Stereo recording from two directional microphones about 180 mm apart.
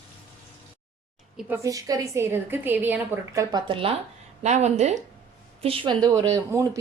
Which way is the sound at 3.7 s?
30° right (ahead or behind).